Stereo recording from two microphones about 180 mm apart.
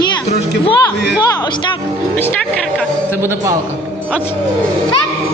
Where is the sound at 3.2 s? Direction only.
15° right (ahead or behind).